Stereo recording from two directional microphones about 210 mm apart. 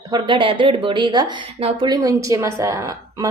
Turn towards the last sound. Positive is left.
turn(degrees=-15)  # may be behind; listen again after turning